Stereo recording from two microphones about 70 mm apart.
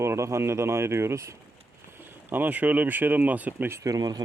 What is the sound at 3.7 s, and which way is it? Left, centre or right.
Speech, right.